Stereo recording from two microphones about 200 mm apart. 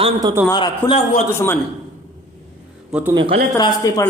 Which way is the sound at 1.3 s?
10° left (ahead or behind).